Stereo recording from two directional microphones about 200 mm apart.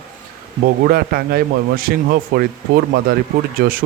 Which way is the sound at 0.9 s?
50° right (ahead or behind).